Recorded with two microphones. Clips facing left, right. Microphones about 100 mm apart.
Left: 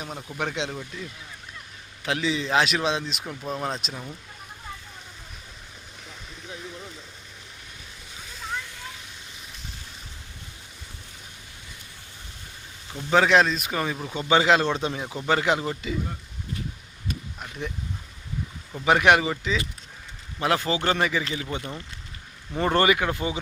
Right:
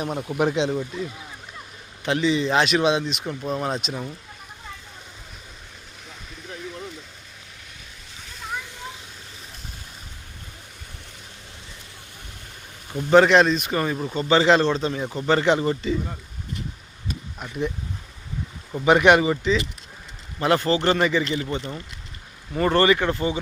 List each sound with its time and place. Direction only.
0.0 s speech: 50° right (ahead or behind)
0.5 s speech: centre (ahead or behind)
2.0 s speech: centre (ahead or behind)
8.3 s slosh: centre (ahead or behind)
13.1 s speech: centre (ahead or behind)
14.1 s speech: 10° left (ahead or behind)
17.1 s bee: centre (ahead or behind)
18.9 s speech: centre (ahead or behind)